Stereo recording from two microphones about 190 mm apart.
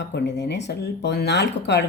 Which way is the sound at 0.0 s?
65° left (ahead or behind).